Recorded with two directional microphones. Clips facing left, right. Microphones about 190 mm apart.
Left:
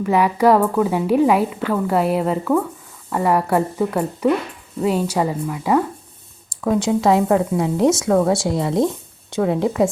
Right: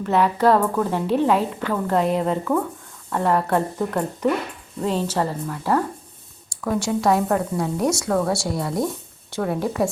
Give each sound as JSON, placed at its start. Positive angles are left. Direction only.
{"t": 0.0, "sound": "a woman's voice", "side_deg": 10}